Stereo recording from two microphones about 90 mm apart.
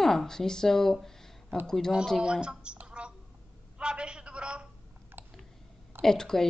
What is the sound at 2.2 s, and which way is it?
Speech, 10° right (ahead or behind).